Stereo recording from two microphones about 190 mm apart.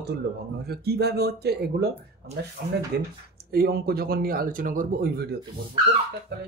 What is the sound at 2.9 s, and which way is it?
Speech, 60° right (ahead or behind).